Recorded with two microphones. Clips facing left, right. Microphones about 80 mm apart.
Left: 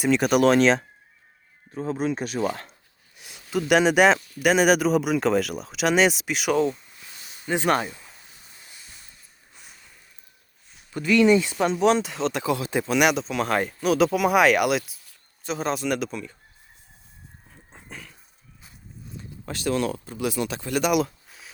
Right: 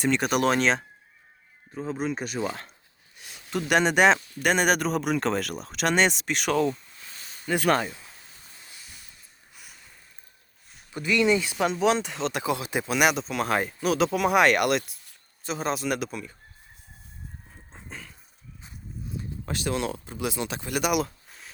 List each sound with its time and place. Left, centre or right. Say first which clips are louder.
0.0 s speech: left 4 dB; centre
6.7 s a sound: even; right
7.4 s speech: left 1 dB; left
7.7 s speech: even; centre
10.9 s speech: left 5 dB; centre
12.4 s speech: left 2 dB; right
12.9 s speech: left 2 dB; centre
17.7 s dog: even; centre
19.5 s speech: left 4 dB; right; by 21.5 s centre